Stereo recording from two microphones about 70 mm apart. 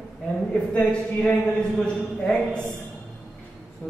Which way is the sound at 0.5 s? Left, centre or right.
Centre.